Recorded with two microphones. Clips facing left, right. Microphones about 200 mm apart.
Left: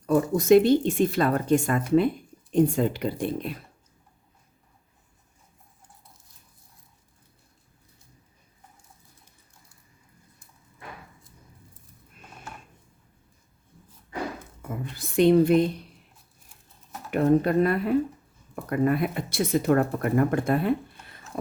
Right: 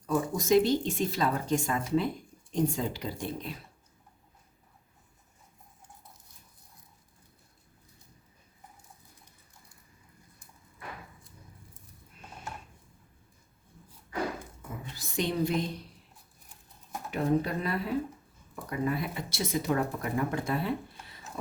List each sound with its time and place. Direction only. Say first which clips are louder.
0.0 s speech: left 7 dB; 60° left (ahead or behind)
14.9 s speech: left 12 dB; 60° left (ahead or behind)
17.1 s speech: left 7 dB; 60° left (ahead or behind)